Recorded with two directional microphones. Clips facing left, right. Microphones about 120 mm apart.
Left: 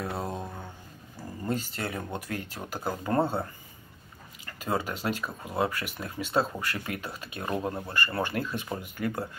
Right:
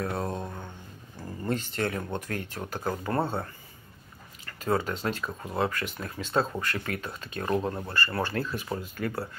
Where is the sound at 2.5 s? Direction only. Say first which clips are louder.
Right 2 dB; 10° left (ahead or behind).